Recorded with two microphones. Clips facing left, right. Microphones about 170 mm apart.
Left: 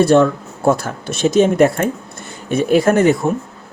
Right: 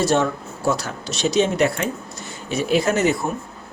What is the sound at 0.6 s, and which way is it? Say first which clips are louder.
Speech: left 7 dB; 50° left (ahead or behind).